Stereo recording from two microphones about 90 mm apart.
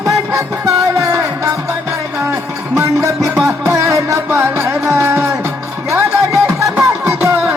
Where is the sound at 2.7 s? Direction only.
35° right (ahead or behind).